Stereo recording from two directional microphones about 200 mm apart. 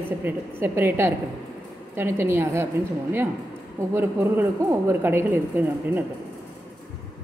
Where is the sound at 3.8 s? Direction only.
15° right (ahead or behind).